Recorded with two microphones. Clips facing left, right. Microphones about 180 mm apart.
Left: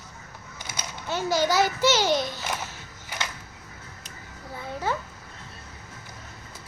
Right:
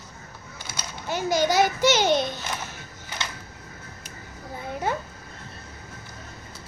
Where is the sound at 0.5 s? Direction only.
15° left (ahead or behind).